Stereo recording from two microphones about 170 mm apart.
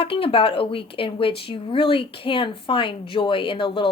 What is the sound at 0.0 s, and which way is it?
Speech, 30° left (ahead or behind).